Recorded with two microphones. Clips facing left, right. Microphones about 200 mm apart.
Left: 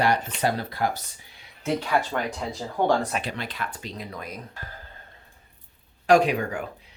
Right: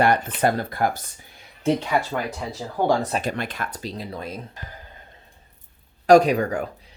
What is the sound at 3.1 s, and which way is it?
Speech, 45° right (ahead or behind).